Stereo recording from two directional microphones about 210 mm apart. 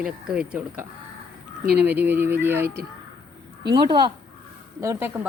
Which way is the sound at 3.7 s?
20° right (ahead or behind).